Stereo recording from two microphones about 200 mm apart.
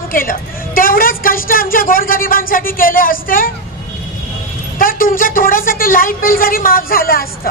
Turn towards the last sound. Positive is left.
turn(degrees=45)  # may be behind; listen again after turning